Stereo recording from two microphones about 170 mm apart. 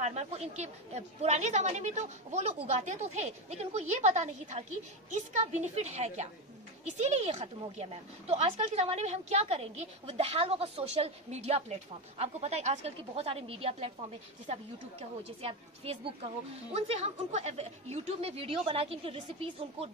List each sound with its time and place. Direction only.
0.0 s a woman's voice: 40° right (ahead or behind)